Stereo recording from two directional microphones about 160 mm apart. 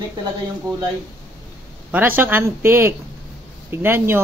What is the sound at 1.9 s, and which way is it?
Speech, 10° right (ahead or behind).